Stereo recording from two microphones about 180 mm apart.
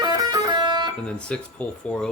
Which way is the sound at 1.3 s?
5° left (ahead or behind).